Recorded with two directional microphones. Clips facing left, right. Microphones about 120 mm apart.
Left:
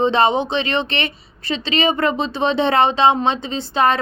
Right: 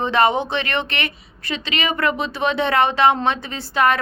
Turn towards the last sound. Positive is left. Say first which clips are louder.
# left 1 dB
turn(degrees=25)  # may be behind; listen again after turning